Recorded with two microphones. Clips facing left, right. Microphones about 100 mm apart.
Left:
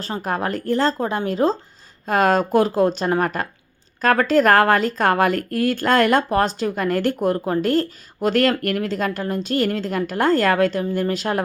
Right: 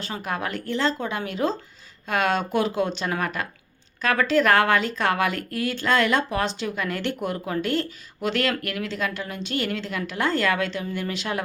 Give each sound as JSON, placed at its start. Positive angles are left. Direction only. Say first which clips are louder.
{"t": 0.0, "sound": "speech", "louder": "left 5 dB", "side_deg": 40}